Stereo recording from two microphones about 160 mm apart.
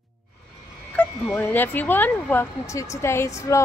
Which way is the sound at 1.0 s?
10° left (ahead or behind).